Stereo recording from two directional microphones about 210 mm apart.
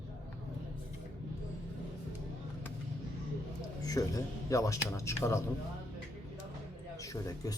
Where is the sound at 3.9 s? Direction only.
15° left (ahead or behind).